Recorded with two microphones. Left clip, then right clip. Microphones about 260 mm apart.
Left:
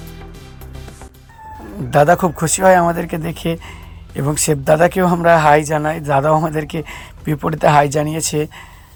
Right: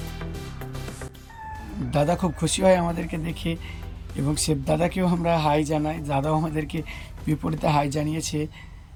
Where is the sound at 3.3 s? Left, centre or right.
Centre.